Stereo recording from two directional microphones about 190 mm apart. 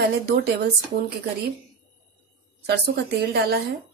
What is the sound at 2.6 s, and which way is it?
Speech, 60° right (ahead or behind).